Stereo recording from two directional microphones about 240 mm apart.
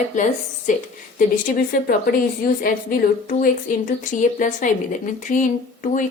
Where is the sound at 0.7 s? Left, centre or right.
Left.